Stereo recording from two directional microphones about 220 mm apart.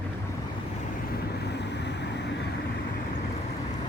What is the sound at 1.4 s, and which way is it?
Vehicle, 50° left (ahead or behind).